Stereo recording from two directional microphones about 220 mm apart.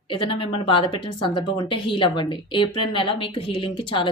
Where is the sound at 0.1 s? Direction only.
25° left (ahead or behind).